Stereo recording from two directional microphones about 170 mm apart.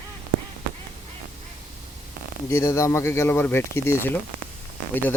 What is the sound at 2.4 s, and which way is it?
Speech, 15° left (ahead or behind).